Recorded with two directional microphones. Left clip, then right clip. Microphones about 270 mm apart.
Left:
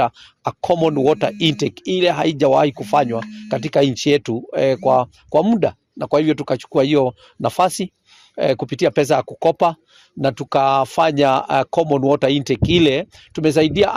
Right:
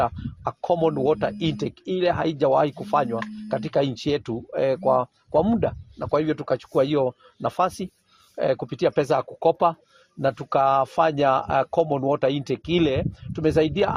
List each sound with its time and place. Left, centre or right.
0.0 s speech: left